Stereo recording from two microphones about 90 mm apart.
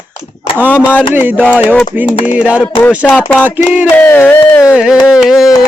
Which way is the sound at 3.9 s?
25° left (ahead or behind).